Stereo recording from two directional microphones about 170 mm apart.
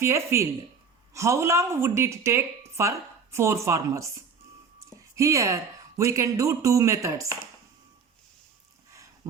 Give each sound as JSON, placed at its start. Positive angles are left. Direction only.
{"t": 0.0, "sound": "speech", "side_deg": -15}
{"t": 5.1, "sound": "speech", "side_deg": -20}